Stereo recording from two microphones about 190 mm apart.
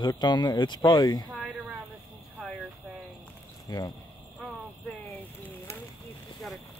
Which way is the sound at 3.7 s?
20° left (ahead or behind).